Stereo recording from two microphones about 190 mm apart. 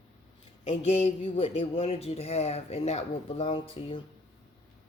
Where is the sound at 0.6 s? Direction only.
40° left (ahead or behind).